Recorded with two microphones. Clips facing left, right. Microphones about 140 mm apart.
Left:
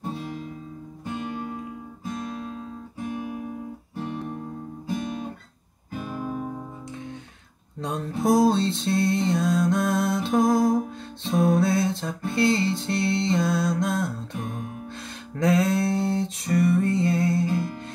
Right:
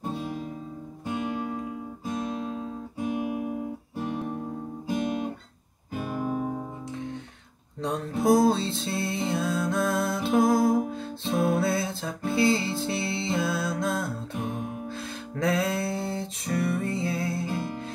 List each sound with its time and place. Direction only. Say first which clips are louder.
2.2 s guitar: right 2 dB; 25° right (ahead or behind)
5.9 s music: right 2 dB; 5° right (ahead or behind)
7.8 s music: even; centre (ahead or behind)
15.3 s music: left 4 dB; centre (ahead or behind)